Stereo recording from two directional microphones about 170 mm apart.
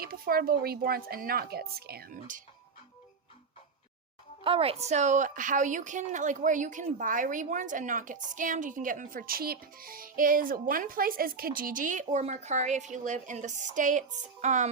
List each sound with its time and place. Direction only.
0.0 s speech: 60° right (ahead or behind)
4.4 s a woman's voice: 35° right (ahead or behind)